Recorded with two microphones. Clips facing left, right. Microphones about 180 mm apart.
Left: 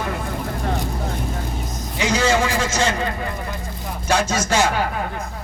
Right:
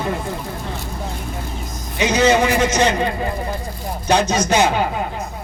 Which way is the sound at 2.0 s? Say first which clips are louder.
Right 4 dB; 20° right (ahead or behind).